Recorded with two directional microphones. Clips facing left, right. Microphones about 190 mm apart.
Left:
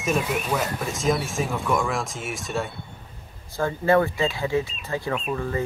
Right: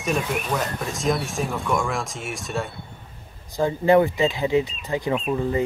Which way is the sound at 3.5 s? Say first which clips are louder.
Right 3 dB; 15° right (ahead or behind).